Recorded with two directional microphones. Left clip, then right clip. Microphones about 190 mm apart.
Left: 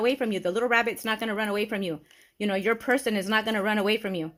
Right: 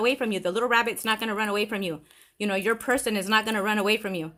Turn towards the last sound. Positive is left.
turn(degrees=15)  # may be behind; listen again after turning